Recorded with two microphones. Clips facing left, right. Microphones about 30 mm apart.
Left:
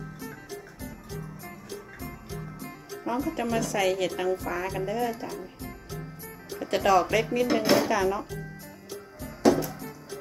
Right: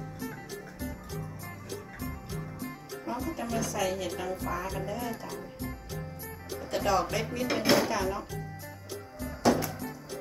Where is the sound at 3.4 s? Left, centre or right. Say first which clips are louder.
Left 5 dB; left.